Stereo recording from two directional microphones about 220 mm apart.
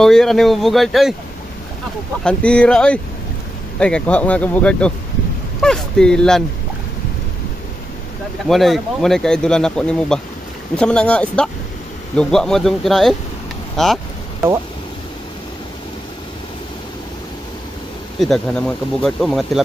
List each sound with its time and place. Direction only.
0.0 s speech: centre (ahead or behind)
2.2 s speech: 5° left (ahead or behind)
8.5 s speech: centre (ahead or behind)
18.2 s speech: centre (ahead or behind)